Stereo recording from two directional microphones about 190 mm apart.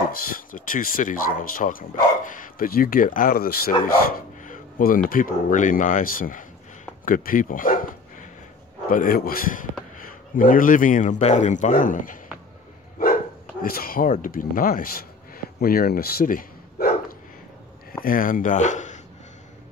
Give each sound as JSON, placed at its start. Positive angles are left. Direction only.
{"t": 0.3, "sound": "speech", "side_deg": 45}
{"t": 13.6, "sound": "speech", "side_deg": 50}
{"t": 18.0, "sound": "speech", "side_deg": 45}